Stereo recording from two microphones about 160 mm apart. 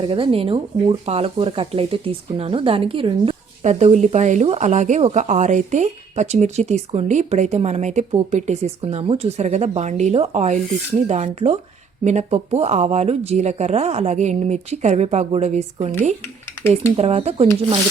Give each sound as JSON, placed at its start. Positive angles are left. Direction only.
{"t": 0.0, "sound": "speech", "side_deg": -35}
{"t": 3.6, "sound": "speech", "side_deg": -45}
{"t": 17.0, "sound": "speech", "side_deg": -40}